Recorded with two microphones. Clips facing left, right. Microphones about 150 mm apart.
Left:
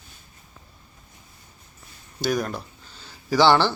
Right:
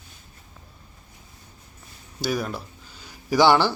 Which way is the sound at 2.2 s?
5° right (ahead or behind).